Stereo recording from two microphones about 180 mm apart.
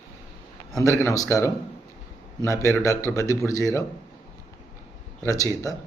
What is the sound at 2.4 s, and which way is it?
Speech, 15° left (ahead or behind).